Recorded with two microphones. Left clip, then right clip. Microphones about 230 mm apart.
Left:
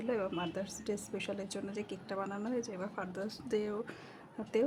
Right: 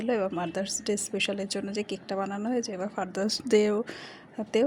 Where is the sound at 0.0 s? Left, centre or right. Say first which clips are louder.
Right 7 dB; centre.